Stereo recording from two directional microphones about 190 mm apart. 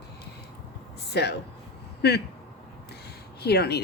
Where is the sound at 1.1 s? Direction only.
60° left (ahead or behind).